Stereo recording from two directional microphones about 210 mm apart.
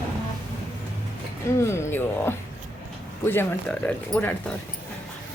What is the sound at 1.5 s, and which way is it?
A woman's voice, 15° left (ahead or behind).